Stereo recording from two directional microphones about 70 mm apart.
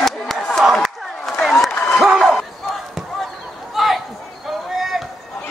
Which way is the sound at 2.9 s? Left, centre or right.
Centre.